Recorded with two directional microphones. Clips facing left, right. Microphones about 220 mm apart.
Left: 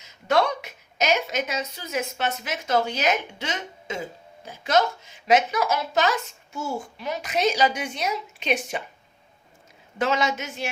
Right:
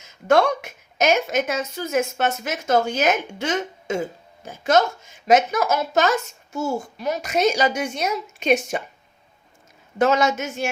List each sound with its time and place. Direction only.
0.0 s speech: 50° right (ahead or behind)
10.0 s speech: 45° right (ahead or behind)